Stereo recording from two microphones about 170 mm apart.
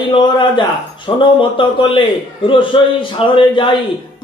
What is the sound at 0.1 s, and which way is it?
Speech, 25° left (ahead or behind).